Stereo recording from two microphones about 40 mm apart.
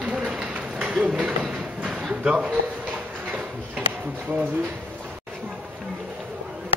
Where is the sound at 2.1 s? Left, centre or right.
Right.